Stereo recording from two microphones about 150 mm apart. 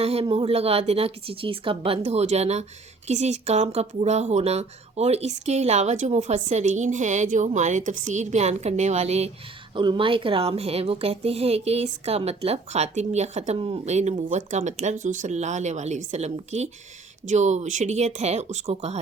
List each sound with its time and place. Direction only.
0.0 s a woman's voice: 40° right (ahead or behind)
9.7 s a woman's voice: 30° right (ahead or behind)